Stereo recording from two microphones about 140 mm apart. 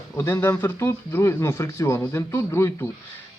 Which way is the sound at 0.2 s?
20° left (ahead or behind).